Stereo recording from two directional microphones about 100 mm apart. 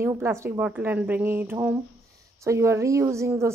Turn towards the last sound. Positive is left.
turn(degrees=-30)  # may be behind; listen again after turning